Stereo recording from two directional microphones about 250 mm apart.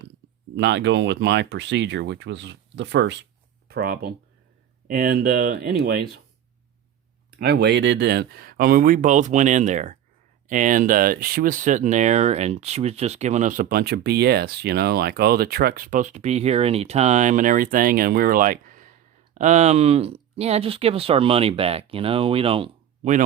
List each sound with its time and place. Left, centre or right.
0.5 s speech: right
7.3 s speech: right